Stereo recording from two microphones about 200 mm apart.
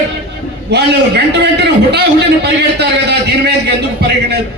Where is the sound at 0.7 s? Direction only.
60° right (ahead or behind).